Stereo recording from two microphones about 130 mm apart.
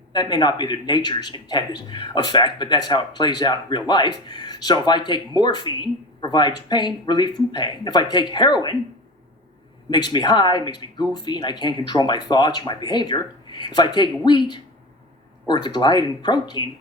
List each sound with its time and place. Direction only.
0.1 s a man's voice: 35° left (ahead or behind)
9.9 s a man's voice: 35° left (ahead or behind)